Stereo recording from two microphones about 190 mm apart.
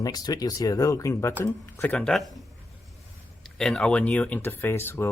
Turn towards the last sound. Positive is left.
turn(degrees=10)  # may be behind; listen again after turning